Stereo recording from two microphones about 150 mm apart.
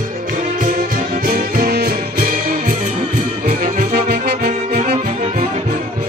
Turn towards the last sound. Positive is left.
turn(degrees=-40)  # may be behind; listen again after turning